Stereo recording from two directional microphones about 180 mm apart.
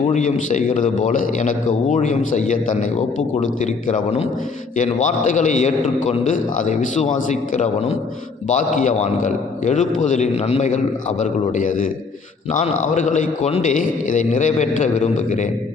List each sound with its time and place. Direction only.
0.1 s a man's voice: 45° left (ahead or behind)